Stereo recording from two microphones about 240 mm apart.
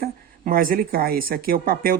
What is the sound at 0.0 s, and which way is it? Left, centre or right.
Speech, right.